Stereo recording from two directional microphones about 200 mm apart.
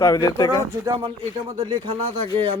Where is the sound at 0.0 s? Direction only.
15° left (ahead or behind).